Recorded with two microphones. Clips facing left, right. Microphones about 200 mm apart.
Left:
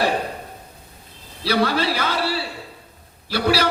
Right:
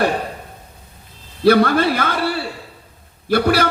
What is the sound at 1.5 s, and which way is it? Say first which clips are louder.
A man's voice: right 7 dB; 55° right (ahead or behind).